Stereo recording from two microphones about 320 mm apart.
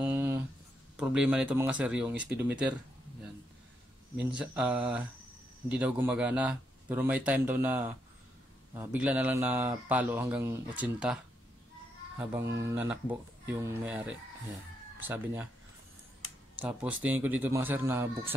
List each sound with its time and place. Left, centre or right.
0.0 s a sound: centre
0.9 s a man's voice: centre
4.2 s a man's voice: centre
12.2 s a man's voice: centre
16.5 s a man's voice: centre